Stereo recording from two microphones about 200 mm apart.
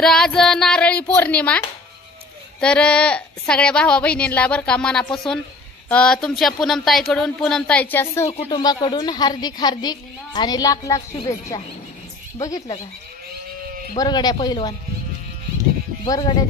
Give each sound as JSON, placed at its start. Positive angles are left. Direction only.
{"t": 0.0, "sound": "a sound", "side_deg": 5}
{"t": 2.6, "sound": "a woman's voice", "side_deg": 5}
{"t": 8.3, "sound": "a woman's voice", "side_deg": 25}
{"t": 13.9, "sound": "a woman's voice", "side_deg": 20}
{"t": 16.1, "sound": "a woman's voice", "side_deg": 20}